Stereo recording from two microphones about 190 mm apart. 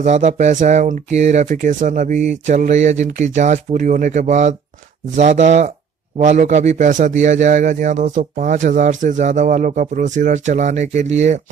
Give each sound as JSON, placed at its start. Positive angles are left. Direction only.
{"t": 0.0, "sound": "a man's voice", "side_deg": -40}